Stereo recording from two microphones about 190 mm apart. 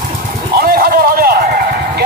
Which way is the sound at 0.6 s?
55° right (ahead or behind).